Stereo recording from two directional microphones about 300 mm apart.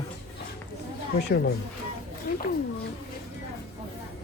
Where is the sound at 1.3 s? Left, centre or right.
Left.